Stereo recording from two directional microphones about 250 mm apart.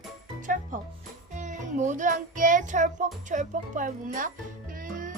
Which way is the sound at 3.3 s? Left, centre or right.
Right.